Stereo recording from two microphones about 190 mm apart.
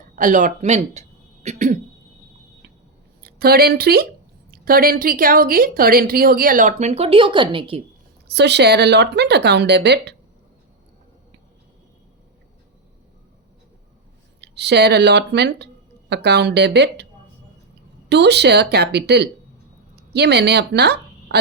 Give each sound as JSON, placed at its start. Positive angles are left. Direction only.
{"t": 0.2, "sound": "speech", "side_deg": -40}
{"t": 3.2, "sound": "a woman's voice", "side_deg": -55}
{"t": 8.3, "sound": "a woman's voice", "side_deg": -65}
{"t": 14.4, "sound": "speech", "side_deg": -60}
{"t": 18.1, "sound": "a woman's voice", "side_deg": -60}